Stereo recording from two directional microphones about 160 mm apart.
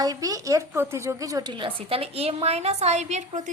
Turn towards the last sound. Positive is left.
turn(degrees=-50)  # may be behind; listen again after turning